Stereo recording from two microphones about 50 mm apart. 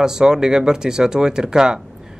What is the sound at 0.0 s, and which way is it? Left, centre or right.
A man's voice, centre.